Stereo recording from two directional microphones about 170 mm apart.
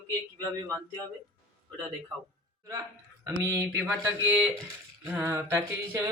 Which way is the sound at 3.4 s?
20° right (ahead or behind).